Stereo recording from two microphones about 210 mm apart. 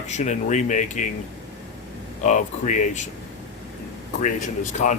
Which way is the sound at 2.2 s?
35° left (ahead or behind).